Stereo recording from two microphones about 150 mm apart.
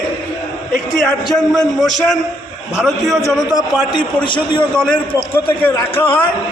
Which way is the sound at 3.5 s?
30° left (ahead or behind).